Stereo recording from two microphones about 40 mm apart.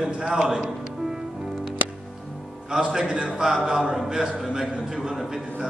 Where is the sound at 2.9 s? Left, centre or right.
Centre.